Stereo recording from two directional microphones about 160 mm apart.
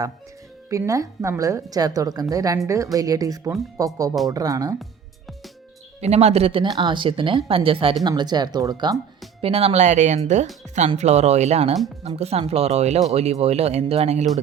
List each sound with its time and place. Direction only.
0.7 s a woman's voice: 20° right (ahead or behind)
6.0 s a woman's voice: 40° right (ahead or behind); by 8.7 s 25° right (ahead or behind)
9.4 s speech: 40° right (ahead or behind)